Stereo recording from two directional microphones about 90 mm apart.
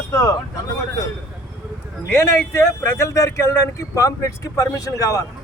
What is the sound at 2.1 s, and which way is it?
Speech, 30° left (ahead or behind).